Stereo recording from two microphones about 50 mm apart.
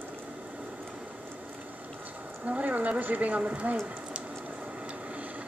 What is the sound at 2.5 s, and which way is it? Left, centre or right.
Speech, right.